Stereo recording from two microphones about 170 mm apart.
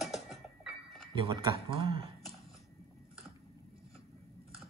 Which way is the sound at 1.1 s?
30° right (ahead or behind).